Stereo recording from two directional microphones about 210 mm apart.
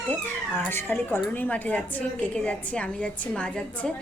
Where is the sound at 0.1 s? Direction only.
10° left (ahead or behind).